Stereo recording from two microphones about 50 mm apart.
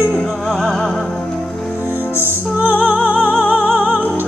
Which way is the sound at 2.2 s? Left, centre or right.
Right.